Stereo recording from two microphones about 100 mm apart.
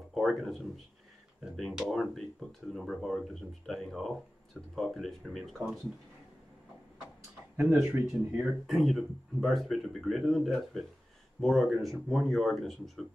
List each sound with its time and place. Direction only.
0.1 s speech: centre (ahead or behind)
7.5 s speech: 20° right (ahead or behind)
8.6 s speech: centre (ahead or behind)